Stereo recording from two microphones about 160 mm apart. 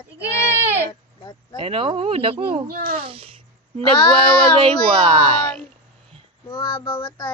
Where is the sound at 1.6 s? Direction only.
35° right (ahead or behind).